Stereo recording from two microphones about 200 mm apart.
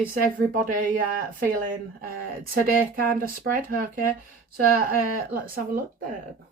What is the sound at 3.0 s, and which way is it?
Speech, 45° right (ahead or behind).